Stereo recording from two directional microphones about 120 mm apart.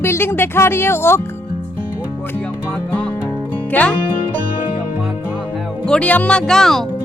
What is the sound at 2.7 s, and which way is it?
Music, 15° left (ahead or behind).